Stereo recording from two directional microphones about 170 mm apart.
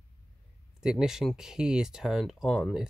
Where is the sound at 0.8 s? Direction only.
5° right (ahead or behind).